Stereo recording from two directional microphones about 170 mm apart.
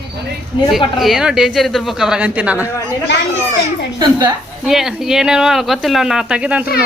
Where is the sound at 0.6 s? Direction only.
30° left (ahead or behind).